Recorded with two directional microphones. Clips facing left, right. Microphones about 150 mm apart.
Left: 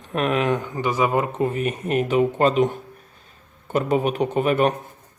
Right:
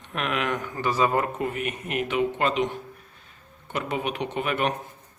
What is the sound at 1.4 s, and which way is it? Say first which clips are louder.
Speech: left 6 dB; 30° left (ahead or behind).